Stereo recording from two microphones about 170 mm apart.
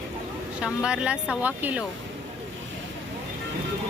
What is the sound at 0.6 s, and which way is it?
Speech, 5° right (ahead or behind).